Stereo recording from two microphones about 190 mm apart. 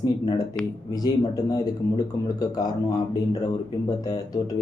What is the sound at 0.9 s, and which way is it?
Speech, 20° left (ahead or behind).